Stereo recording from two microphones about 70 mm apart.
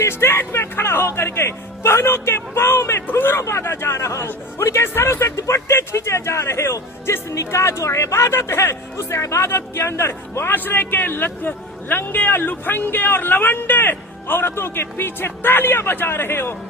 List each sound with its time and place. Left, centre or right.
0.0 s speech: left
3.4 s a man's voice: left